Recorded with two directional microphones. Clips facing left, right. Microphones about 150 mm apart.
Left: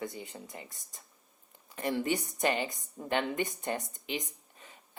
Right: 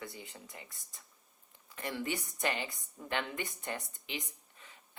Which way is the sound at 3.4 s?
20° left (ahead or behind).